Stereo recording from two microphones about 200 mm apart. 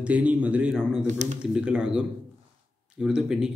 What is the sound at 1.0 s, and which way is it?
Speech, 35° right (ahead or behind).